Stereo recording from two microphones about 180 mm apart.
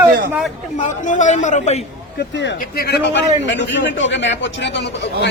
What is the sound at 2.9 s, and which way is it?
A man's voice, 75° left (ahead or behind).